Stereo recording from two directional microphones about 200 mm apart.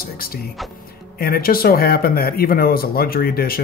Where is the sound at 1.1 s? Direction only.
50° left (ahead or behind).